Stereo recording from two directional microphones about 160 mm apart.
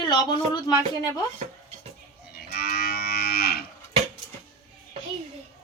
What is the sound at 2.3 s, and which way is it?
Livestock, 75° left (ahead or behind).